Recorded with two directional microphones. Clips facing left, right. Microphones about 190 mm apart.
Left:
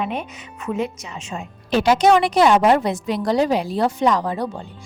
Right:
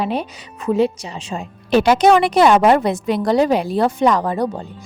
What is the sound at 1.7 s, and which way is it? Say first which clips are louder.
A woman's voice: right 3 dB; 60° right (ahead or behind).